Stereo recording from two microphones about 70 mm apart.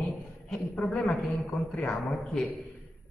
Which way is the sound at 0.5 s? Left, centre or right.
Centre.